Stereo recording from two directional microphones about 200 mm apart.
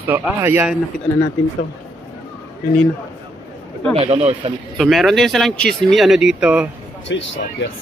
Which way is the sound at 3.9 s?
30° right (ahead or behind).